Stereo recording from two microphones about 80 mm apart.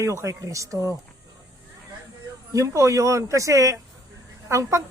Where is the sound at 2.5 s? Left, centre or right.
Right.